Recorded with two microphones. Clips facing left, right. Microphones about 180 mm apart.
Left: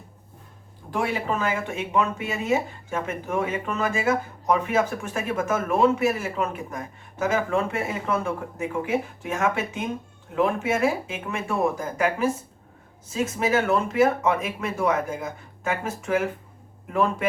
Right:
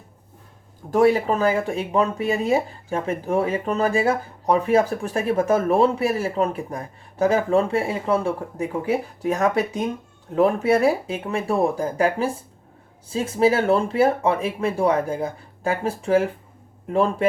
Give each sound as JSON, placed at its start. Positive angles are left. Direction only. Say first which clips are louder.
{"t": 0.9, "sound": "speech", "louder": "right 9 dB", "side_deg": -40}